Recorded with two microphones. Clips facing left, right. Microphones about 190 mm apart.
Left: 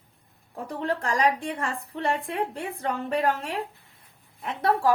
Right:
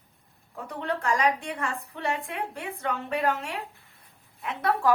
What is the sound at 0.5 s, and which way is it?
A woman's voice, 35° left (ahead or behind).